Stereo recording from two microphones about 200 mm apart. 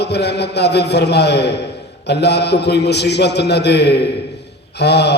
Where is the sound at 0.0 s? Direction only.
55° left (ahead or behind).